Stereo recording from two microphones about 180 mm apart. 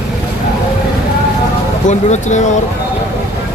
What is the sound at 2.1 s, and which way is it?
Speech, 40° left (ahead or behind).